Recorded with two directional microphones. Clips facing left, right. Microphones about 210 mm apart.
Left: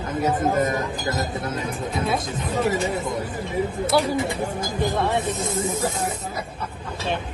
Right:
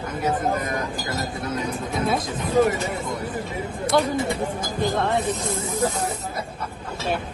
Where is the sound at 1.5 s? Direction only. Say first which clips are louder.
Right 1 dB; 25° left (ahead or behind).